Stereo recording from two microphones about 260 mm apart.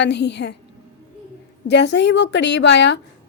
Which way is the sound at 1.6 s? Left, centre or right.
Left.